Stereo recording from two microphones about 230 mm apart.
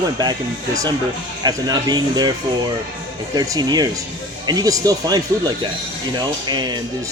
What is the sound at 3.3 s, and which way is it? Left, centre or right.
Speech, centre.